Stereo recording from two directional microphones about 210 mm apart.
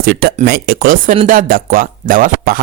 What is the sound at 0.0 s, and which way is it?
Speech, 45° right (ahead or behind).